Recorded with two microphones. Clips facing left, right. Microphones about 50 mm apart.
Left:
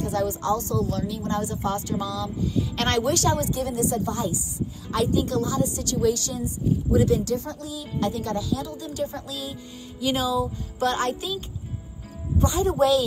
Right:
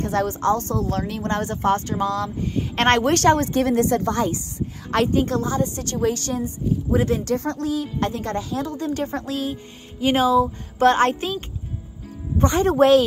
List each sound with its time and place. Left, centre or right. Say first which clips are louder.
0.0 s a woman's voice: right 4 dB; right